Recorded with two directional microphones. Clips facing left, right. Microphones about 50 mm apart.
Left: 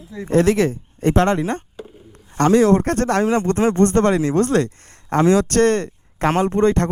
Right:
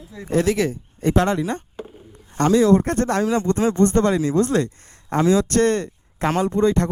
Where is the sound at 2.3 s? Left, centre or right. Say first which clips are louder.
Left 2 dB; left.